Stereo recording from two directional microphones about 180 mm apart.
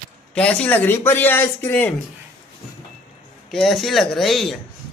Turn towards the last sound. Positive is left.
turn(degrees=0)  # may be behind; listen again after turning